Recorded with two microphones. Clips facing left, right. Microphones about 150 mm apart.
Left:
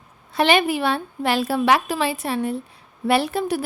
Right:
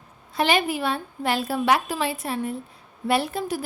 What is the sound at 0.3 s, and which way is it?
A woman's voice, 75° left (ahead or behind).